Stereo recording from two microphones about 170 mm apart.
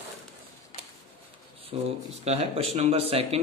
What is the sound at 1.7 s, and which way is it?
Speech, 40° right (ahead or behind).